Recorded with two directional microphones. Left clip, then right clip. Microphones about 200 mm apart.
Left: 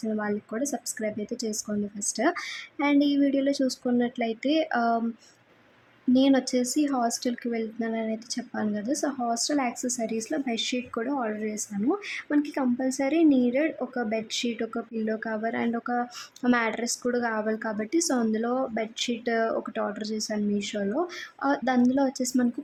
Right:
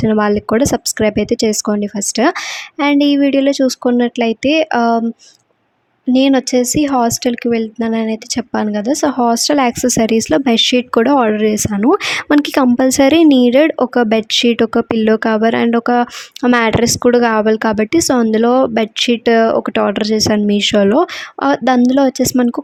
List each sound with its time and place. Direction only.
0.0 s speech: 45° right (ahead or behind)
6.1 s speech: 40° right (ahead or behind)